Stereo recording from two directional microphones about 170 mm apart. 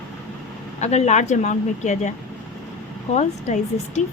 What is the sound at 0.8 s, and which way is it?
Speech, 40° left (ahead or behind).